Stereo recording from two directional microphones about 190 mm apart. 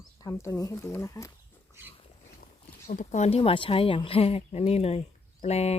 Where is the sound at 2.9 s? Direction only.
40° left (ahead or behind).